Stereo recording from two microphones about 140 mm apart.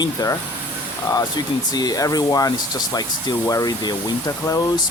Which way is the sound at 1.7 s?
25° left (ahead or behind).